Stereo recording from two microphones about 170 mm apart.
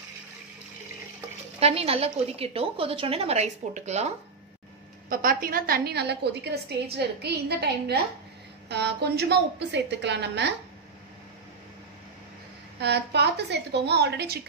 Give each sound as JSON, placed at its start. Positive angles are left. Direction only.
{"t": 1.6, "sound": "a woman's voice", "side_deg": -35}
{"t": 5.1, "sound": "a woman's voice", "side_deg": -55}
{"t": 8.6, "sound": "a woman's voice", "side_deg": -85}
{"t": 12.8, "sound": "a woman's voice", "side_deg": -80}